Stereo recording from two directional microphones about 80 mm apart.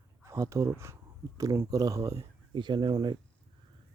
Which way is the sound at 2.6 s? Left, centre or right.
Right.